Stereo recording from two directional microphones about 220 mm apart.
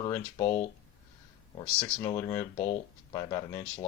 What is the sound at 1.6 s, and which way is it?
Speech, 20° left (ahead or behind).